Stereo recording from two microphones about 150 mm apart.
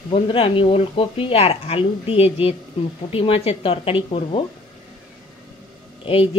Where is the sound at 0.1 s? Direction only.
35° left (ahead or behind).